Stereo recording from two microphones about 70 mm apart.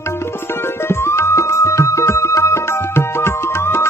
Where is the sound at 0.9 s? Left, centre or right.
Left.